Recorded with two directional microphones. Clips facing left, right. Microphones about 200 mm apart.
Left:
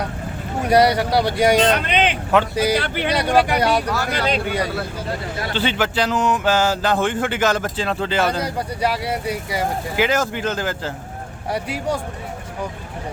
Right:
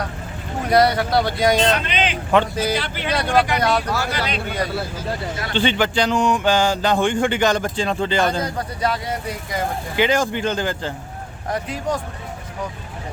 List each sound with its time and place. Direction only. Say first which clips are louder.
0.7 s speech: left 1 dB; 10° left (ahead or behind)
1.9 s vehicle: left 4 dB; 60° left (ahead or behind)
2.3 s speech: even; 10° left (ahead or behind)
2.7 s speech: left 4 dB; 55° left (ahead or behind)
3.1 s speech: left 1 dB; 10° left (ahead or behind)
5.5 s speech: right 2 dB; 5° left (ahead or behind)